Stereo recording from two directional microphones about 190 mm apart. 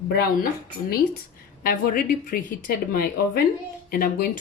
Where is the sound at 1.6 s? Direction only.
50° left (ahead or behind).